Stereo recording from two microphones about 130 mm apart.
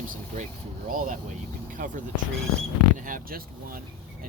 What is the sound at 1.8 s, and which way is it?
Speech, 90° right.